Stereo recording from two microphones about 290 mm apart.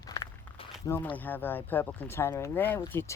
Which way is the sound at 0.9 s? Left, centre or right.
Centre.